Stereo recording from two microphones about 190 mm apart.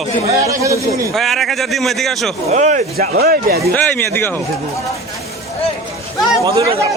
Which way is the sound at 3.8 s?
10° left (ahead or behind).